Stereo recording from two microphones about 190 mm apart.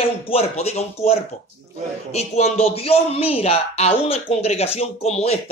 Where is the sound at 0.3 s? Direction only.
30° left (ahead or behind).